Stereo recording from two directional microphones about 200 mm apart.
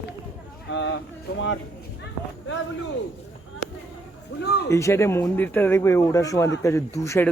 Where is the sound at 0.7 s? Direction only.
65° left (ahead or behind).